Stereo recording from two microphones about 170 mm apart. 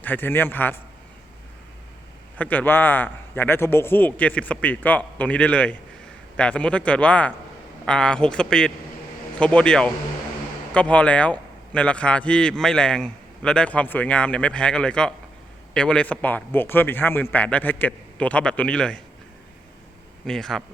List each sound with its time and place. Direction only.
0.0 s a man's voice: 10° left (ahead or behind)
2.4 s a man's voice: 10° left (ahead or behind)
20.2 s a man's voice: 5° left (ahead or behind)